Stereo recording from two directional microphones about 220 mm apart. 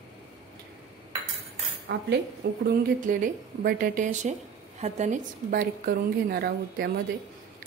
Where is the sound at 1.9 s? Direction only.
50° right (ahead or behind).